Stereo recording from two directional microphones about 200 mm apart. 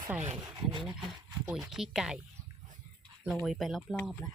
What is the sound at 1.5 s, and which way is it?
Speech, 5° right (ahead or behind).